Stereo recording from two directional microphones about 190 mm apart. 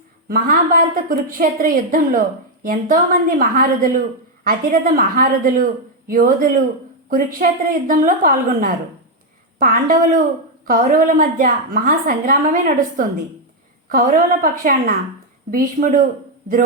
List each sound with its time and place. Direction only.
0.3 s a woman's voice: 50° right (ahead or behind)